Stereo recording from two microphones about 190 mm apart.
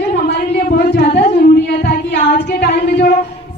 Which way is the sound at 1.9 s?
45° left (ahead or behind).